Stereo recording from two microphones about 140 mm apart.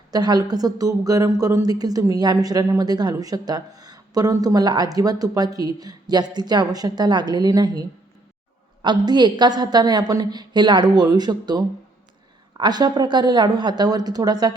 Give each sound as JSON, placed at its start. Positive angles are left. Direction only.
{"t": 0.1, "sound": "speech", "side_deg": -30}